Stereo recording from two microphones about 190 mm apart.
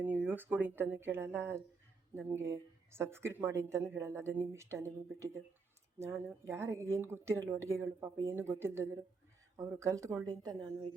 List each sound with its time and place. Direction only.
0.0 s speech: 10° right (ahead or behind)